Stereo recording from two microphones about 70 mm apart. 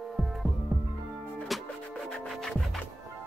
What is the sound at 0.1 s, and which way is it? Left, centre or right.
Music, centre.